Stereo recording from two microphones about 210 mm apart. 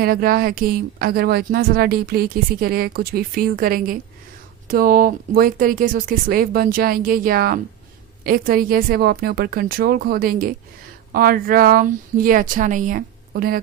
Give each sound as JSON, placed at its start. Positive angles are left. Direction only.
{"t": 0.0, "sound": "speech", "side_deg": -45}